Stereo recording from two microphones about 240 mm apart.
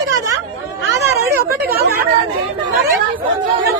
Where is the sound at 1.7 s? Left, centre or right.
Right.